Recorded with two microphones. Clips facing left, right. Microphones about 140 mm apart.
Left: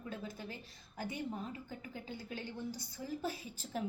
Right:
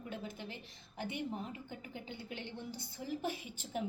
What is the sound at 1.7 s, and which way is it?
A woman's voice, 25° right (ahead or behind).